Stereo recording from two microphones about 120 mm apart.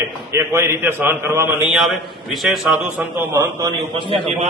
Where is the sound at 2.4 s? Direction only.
Centre (ahead or behind).